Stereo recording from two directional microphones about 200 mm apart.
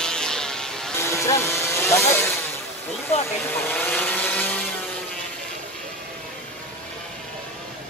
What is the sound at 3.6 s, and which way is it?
Vehicle, 10° left (ahead or behind).